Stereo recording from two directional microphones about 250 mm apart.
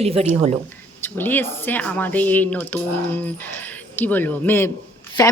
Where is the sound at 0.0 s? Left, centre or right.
Right.